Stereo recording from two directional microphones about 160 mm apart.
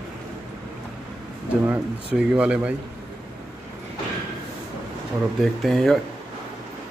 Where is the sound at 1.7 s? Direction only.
5° right (ahead or behind).